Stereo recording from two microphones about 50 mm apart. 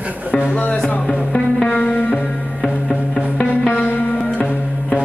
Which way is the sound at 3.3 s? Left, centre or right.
Left.